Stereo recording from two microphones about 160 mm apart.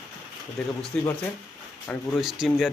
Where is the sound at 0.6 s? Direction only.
5° left (ahead or behind).